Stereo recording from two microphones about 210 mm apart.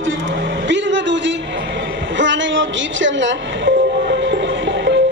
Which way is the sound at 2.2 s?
60° right (ahead or behind).